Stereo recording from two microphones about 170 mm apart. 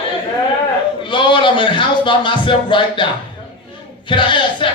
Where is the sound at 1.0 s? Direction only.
30° left (ahead or behind).